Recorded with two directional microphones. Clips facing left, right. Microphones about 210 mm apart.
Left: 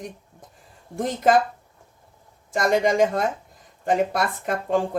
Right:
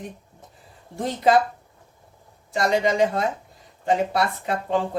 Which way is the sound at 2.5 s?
50° left (ahead or behind).